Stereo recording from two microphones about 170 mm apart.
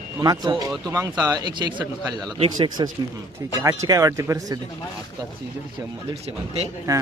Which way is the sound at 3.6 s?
20° right (ahead or behind).